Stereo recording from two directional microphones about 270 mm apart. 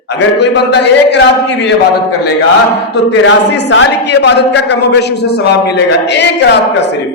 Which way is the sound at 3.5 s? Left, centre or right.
Left.